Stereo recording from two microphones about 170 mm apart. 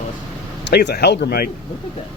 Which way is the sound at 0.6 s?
75° left (ahead or behind).